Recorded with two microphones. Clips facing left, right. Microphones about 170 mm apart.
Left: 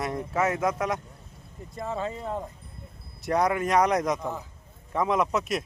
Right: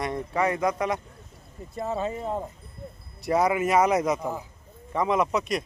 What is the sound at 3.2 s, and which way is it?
Speech, 5° right (ahead or behind).